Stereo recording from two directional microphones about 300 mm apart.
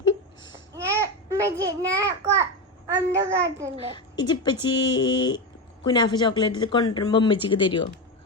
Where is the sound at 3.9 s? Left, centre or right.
Centre.